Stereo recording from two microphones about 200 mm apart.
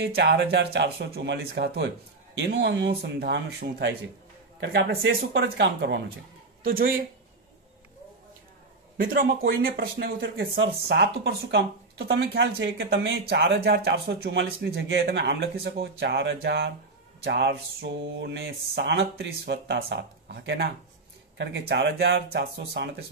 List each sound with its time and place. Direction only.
0.0 s speech: 55° right (ahead or behind)
6.6 s speech: 45° right (ahead or behind)
8.9 s speech: 45° right (ahead or behind)